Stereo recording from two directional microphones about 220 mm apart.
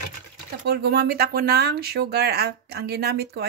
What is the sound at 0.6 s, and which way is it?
Speech, 45° right (ahead or behind).